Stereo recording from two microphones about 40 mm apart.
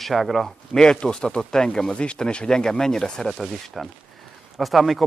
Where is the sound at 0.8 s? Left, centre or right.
Left.